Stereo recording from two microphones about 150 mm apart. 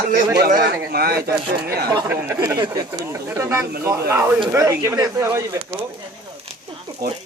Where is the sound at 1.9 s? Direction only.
25° right (ahead or behind).